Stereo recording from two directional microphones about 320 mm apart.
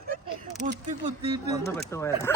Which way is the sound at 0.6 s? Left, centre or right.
Right.